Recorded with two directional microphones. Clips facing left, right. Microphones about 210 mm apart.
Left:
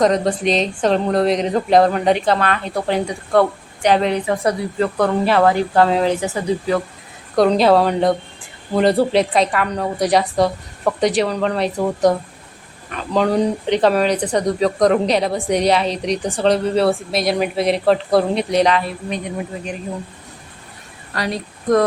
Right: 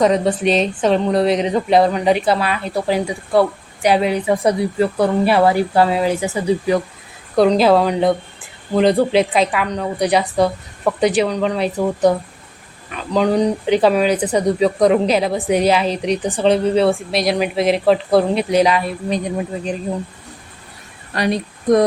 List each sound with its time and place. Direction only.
0.0 s speech: 5° right (ahead or behind)
7.3 s speech: centre (ahead or behind)
21.2 s speech: 20° right (ahead or behind)